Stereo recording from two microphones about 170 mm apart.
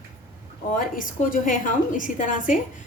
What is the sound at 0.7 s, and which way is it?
A woman's voice, 55° left (ahead or behind).